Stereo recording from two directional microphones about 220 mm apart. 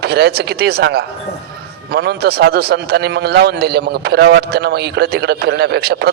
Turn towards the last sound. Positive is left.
turn(degrees=-45)  # may be behind; listen again after turning